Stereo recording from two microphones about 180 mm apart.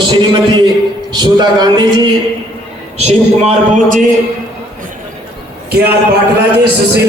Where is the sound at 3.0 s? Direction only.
40° right (ahead or behind).